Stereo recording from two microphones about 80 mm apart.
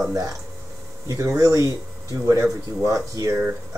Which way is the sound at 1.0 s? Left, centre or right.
Right.